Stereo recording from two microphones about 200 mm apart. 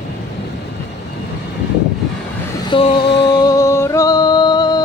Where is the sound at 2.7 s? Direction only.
25° left (ahead or behind).